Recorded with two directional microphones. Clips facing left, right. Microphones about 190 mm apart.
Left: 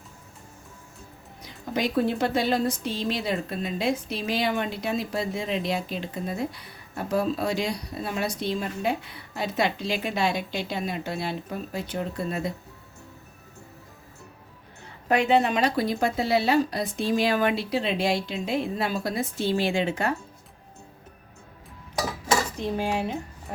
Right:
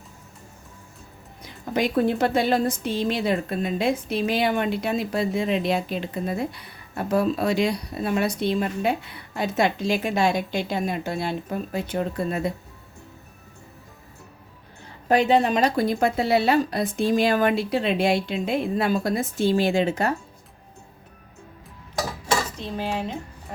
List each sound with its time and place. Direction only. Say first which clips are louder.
1.4 s a woman's voice: right 3 dB; 55° right (ahead or behind)
15.1 s a woman's voice: right 2 dB; 35° right (ahead or behind)
22.5 s dishes: left 2 dB; 15° left (ahead or behind)